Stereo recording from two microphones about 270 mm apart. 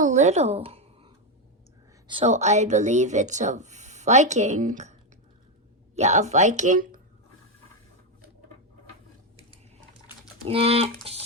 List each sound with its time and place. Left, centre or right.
0.0 s a sound: right
2.0 s speech: right
10.4 s speech: right